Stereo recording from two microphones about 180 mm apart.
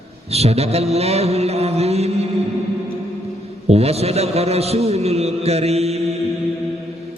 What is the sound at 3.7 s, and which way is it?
Mantra, 35° right (ahead or behind).